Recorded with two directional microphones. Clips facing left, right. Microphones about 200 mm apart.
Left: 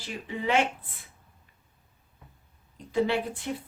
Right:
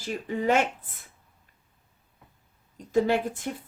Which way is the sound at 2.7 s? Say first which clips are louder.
Right 3 dB; 45° right (ahead or behind).